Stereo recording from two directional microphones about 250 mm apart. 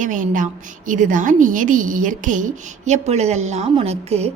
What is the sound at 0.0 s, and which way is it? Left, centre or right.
A woman's voice, right.